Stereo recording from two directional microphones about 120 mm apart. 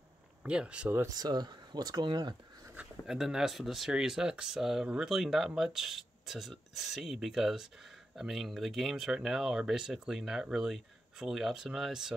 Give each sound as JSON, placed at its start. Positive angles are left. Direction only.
{"t": 0.4, "sound": "speech", "side_deg": -10}
{"t": 1.0, "sound": "speech", "side_deg": -35}
{"t": 2.6, "sound": "a sound", "side_deg": -15}
{"t": 3.1, "sound": "speech", "side_deg": -5}